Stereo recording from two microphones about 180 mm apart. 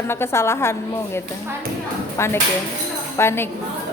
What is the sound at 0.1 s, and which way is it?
A woman's voice, 15° left (ahead or behind).